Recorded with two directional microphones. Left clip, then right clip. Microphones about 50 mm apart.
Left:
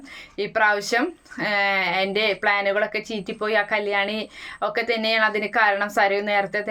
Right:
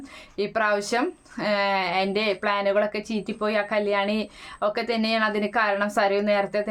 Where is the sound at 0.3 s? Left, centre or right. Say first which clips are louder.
Left 3 dB; right.